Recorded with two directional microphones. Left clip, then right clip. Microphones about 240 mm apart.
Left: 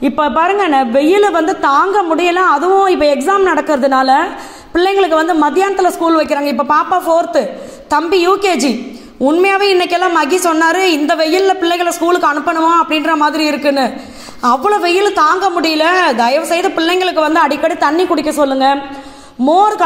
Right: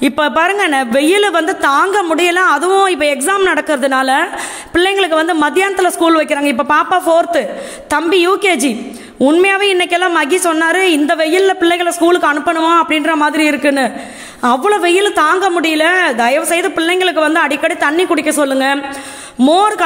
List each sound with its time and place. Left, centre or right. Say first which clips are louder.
0.0 s a woman's voice: even; right
6.1 s a woman's voice: even; right
17.3 s a woman's voice: left 1 dB; right